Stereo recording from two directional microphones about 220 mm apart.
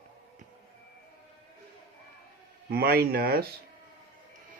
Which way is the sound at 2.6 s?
45° right (ahead or behind).